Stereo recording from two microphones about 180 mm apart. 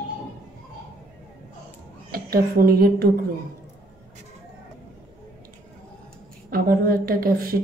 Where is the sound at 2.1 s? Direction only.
55° right (ahead or behind).